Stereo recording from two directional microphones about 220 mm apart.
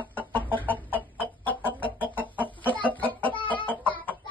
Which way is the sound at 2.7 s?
10° left (ahead or behind).